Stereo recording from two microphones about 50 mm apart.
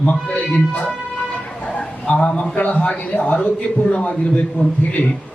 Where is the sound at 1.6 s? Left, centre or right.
Left.